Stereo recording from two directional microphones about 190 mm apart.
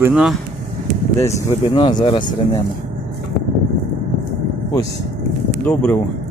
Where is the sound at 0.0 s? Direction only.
5° right (ahead or behind).